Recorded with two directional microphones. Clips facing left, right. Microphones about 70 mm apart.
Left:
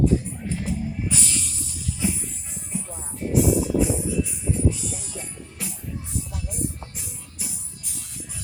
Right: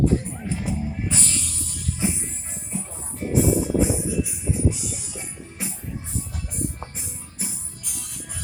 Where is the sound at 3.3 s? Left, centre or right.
Right.